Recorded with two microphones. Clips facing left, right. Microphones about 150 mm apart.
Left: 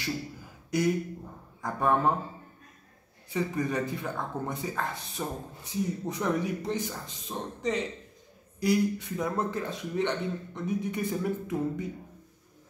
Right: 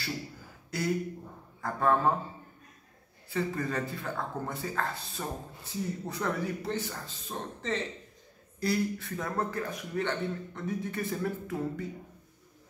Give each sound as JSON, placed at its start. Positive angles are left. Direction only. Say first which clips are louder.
{"t": 0.7, "sound": "speech", "louder": "left 4 dB", "side_deg": 15}
{"t": 3.3, "sound": "speech", "louder": "left 2 dB", "side_deg": 15}